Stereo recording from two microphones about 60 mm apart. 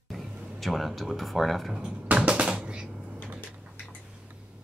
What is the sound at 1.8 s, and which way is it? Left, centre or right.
Music, centre.